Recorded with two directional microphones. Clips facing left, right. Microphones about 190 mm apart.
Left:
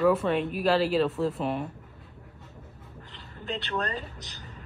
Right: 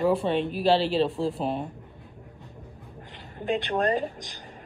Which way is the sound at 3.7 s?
45° right (ahead or behind).